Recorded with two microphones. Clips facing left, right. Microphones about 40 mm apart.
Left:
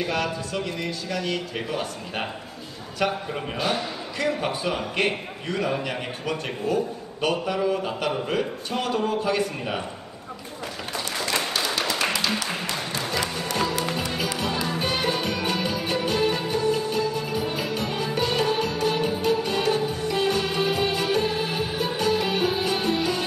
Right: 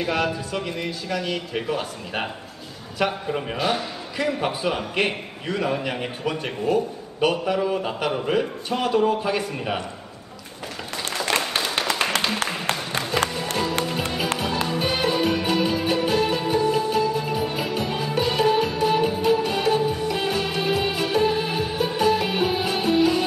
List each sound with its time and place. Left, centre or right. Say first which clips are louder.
0.0 s a man's voice: right 2 dB; centre
11.2 s tap: right 3 dB; right
12.4 s music: right 3 dB; right
14.7 s music: right 2 dB; centre